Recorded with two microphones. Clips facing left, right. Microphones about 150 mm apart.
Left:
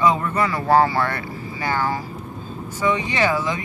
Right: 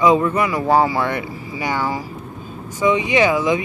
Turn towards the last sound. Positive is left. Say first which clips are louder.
# right 5 dB
turn(degrees=-15)  # may be behind; listen again after turning